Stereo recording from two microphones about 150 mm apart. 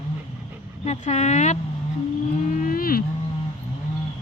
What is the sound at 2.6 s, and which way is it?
Cattle, 75° left (ahead or behind).